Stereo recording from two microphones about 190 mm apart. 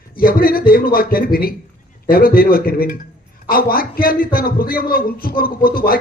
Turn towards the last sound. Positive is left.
turn(degrees=50)  # may be behind; listen again after turning